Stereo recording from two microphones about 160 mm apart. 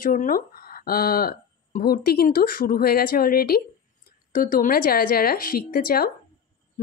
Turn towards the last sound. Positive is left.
turn(degrees=65)  # may be behind; listen again after turning